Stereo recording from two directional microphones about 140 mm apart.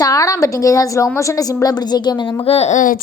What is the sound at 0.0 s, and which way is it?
A woman's voice, 25° left (ahead or behind).